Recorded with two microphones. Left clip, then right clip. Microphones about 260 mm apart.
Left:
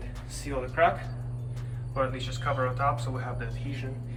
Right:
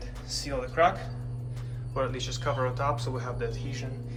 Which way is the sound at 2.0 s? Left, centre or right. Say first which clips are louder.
Left 1 dB; centre.